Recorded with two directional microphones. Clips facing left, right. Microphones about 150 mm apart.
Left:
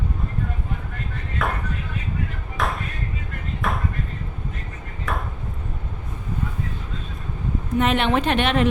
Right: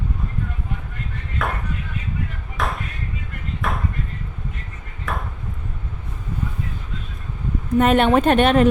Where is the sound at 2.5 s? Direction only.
Centre (ahead or behind).